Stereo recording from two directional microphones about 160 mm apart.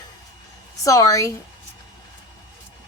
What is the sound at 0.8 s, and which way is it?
Speech, 20° left (ahead or behind).